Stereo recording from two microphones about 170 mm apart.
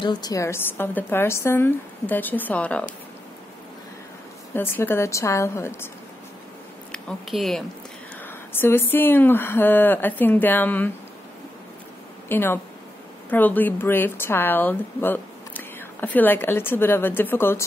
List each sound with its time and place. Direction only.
0.0 s speech: 25° left (ahead or behind); by 2.8 s 10° left (ahead or behind)
4.6 s speech: 10° left (ahead or behind)
6.9 s speech: centre (ahead or behind)
8.3 s speech: 15° left (ahead or behind)
12.3 s speech: 15° left (ahead or behind)